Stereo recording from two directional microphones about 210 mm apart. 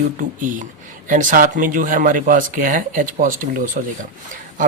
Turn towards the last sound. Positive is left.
turn(degrees=-40)  # may be behind; listen again after turning